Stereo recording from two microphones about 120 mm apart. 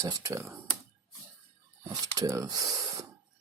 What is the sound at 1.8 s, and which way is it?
Speech, 30° right (ahead or behind).